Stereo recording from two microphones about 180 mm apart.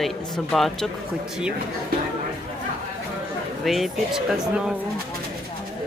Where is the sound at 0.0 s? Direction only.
Centre (ahead or behind).